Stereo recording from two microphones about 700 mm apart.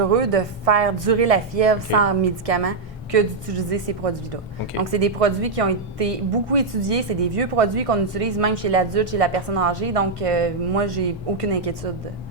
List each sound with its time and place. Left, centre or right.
0.0 s a woman's voice: right